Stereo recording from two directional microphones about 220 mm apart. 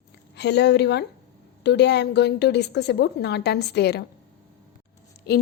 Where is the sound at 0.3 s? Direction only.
50° left (ahead or behind).